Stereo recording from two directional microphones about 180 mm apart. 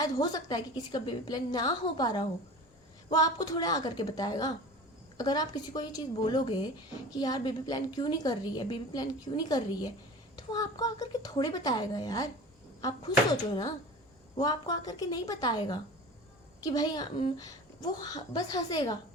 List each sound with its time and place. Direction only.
0.0 s a woman's voice: 20° left (ahead or behind)